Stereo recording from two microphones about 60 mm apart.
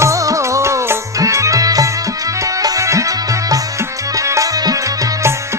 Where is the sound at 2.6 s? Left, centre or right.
Right.